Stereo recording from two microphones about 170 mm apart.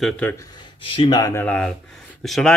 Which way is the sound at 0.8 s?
30° left (ahead or behind).